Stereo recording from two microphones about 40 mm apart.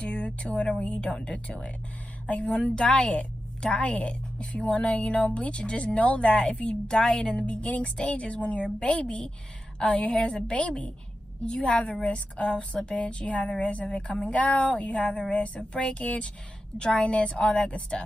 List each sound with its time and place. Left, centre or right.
0.0 s a woman's voice: left
2.2 s speech: left
2.5 s a woman's voice: left
6.9 s a woman's voice: centre
7.6 s music: left
8.0 s a woman's voice: left
11.9 s a woman's voice: left
12.9 s a woman's voice: left